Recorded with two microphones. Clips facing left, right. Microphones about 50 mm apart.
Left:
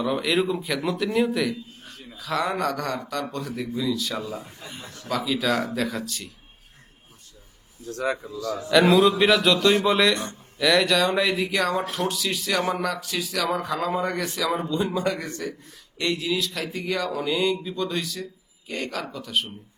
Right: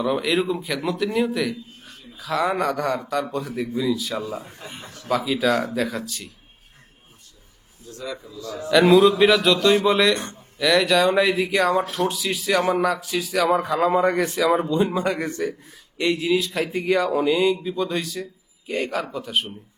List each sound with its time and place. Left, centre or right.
0.0 s a man's voice: centre
4.3 s speech: right
5.0 s speech: centre
7.9 s speech: left
8.7 s speech: centre
13.7 s speech: right
17.3 s a man's voice: centre